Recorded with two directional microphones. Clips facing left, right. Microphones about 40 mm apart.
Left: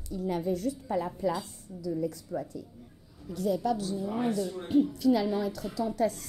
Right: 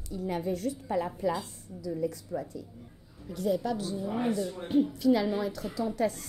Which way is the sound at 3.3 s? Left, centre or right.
Right.